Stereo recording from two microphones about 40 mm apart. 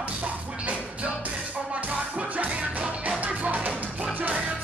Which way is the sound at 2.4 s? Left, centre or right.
Right.